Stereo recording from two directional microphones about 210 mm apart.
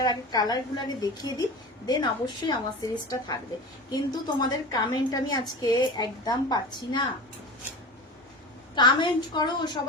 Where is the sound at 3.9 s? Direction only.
20° left (ahead or behind).